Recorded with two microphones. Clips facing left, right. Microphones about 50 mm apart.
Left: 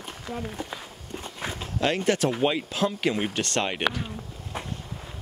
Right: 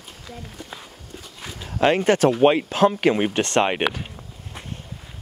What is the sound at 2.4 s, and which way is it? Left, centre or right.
Speech, right.